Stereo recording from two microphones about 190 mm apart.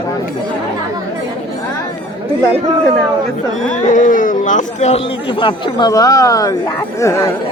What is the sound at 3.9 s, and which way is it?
Speech, 45° left (ahead or behind).